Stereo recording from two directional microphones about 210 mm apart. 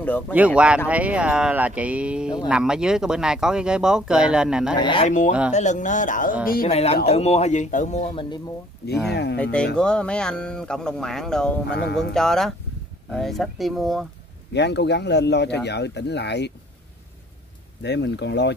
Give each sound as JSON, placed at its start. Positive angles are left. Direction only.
{"t": 0.6, "sound": "speech", "side_deg": -5}
{"t": 4.7, "sound": "speech", "side_deg": 25}
{"t": 5.5, "sound": "speech", "side_deg": 35}
{"t": 6.7, "sound": "speech", "side_deg": 30}
{"t": 9.1, "sound": "speech", "side_deg": 50}
{"t": 9.4, "sound": "speech", "side_deg": 5}
{"t": 11.7, "sound": "speech", "side_deg": 55}
{"t": 12.1, "sound": "speech", "side_deg": 0}
{"t": 14.5, "sound": "speech", "side_deg": 55}
{"t": 17.8, "sound": "speech", "side_deg": 55}